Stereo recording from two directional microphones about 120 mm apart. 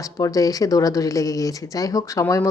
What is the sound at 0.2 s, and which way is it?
Speech, 30° left (ahead or behind).